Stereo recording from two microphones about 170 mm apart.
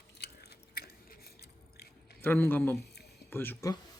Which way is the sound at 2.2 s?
10° left (ahead or behind).